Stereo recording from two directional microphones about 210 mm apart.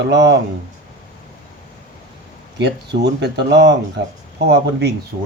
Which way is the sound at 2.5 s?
55° right (ahead or behind).